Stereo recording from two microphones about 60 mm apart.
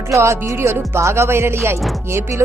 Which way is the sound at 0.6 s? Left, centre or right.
Right.